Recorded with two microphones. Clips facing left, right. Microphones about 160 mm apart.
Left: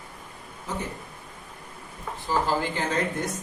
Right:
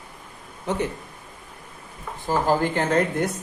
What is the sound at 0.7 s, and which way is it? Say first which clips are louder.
Speech: right 7 dB; 65° right (ahead or behind).